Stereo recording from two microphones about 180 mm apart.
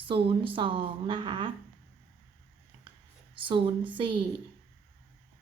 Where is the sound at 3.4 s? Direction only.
30° right (ahead or behind).